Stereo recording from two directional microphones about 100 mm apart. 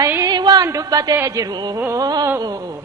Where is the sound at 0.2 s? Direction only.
45° right (ahead or behind).